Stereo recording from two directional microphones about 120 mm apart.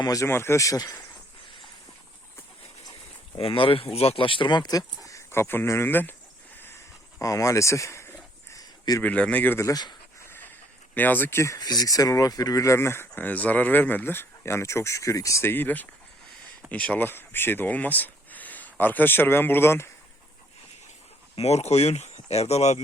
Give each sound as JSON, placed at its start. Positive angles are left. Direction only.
{"t": 0.0, "sound": "speech", "side_deg": 30}
{"t": 3.3, "sound": "speech", "side_deg": 50}
{"t": 5.0, "sound": "speech", "side_deg": 25}
{"t": 7.2, "sound": "speech", "side_deg": 25}
{"t": 8.5, "sound": "a sound", "side_deg": 30}
{"t": 9.0, "sound": "speech", "side_deg": 10}
{"t": 10.2, "sound": "a sound", "side_deg": 15}
{"t": 10.9, "sound": "speech", "side_deg": 15}
{"t": 21.3, "sound": "speech", "side_deg": 65}